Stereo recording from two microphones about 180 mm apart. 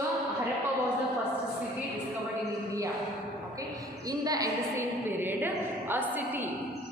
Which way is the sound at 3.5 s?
20° right (ahead or behind).